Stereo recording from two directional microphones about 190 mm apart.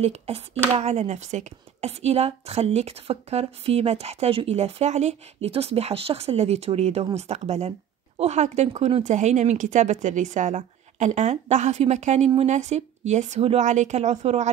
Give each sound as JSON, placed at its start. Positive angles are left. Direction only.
{"t": 0.0, "sound": "speech", "side_deg": -35}